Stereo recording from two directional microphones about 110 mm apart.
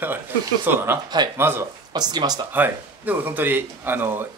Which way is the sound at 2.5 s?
15° right (ahead or behind).